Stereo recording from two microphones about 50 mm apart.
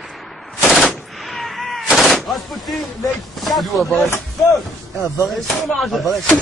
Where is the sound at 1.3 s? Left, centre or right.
Centre.